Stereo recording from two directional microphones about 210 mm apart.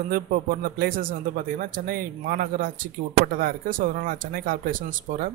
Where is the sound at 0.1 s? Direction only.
45° right (ahead or behind).